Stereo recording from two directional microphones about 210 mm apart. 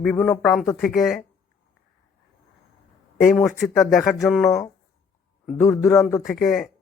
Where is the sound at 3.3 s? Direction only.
Centre (ahead or behind).